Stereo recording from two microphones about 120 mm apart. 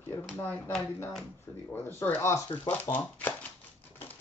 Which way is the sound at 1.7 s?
20° left (ahead or behind).